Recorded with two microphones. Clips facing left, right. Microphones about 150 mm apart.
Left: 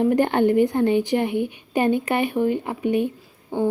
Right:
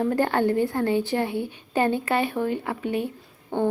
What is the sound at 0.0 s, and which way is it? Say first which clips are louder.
Speech: left 4 dB; 20° left (ahead or behind).